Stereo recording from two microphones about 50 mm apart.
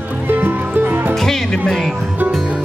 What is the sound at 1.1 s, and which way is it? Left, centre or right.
Music, centre.